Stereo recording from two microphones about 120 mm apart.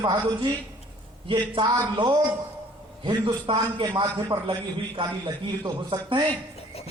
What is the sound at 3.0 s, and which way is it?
A man's voice, 40° right (ahead or behind).